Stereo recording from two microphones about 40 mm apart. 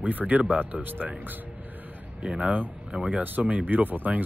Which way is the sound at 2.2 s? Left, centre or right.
Right.